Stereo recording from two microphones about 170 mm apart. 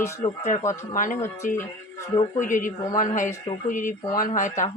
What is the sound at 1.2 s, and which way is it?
Speech, 15° left (ahead or behind).